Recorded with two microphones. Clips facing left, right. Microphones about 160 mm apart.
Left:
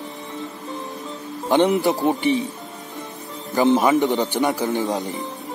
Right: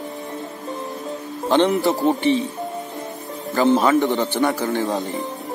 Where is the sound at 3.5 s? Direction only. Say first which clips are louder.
Even; 15° left (ahead or behind).